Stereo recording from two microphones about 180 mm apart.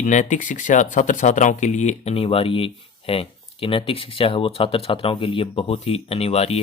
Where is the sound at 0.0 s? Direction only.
40° left (ahead or behind).